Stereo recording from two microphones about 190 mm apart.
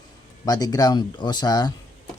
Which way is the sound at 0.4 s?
20° left (ahead or behind).